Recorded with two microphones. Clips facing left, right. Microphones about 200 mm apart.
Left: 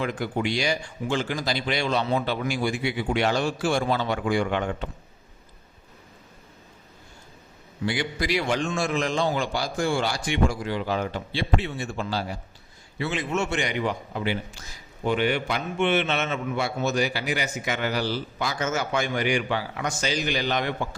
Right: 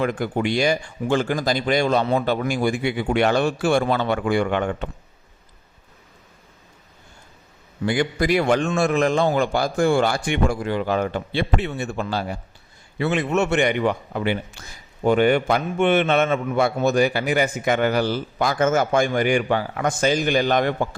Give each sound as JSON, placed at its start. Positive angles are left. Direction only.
{"t": 0.0, "sound": "a man's voice", "side_deg": -55}
{"t": 7.9, "sound": "a man's voice", "side_deg": -50}